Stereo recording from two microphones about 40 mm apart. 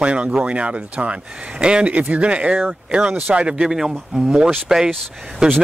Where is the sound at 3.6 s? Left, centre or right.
Centre.